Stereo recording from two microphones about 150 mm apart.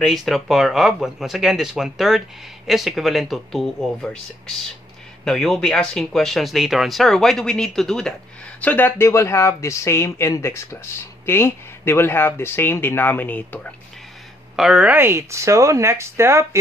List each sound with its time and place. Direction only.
0.0 s speech: centre (ahead or behind)
5.2 s speech: centre (ahead or behind)
14.5 s speech: 5° right (ahead or behind)